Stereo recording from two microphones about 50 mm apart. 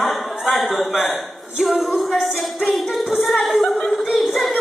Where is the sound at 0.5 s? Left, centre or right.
Centre.